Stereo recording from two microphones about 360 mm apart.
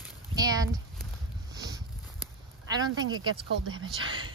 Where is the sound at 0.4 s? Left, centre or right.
Centre.